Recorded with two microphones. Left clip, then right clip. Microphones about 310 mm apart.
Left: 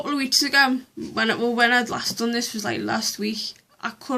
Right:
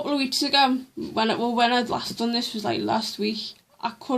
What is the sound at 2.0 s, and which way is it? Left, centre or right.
A woman's voice, centre.